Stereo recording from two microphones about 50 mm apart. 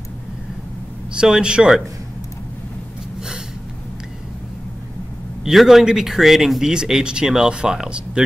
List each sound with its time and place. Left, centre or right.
1.1 s speech: centre
5.4 s speech: centre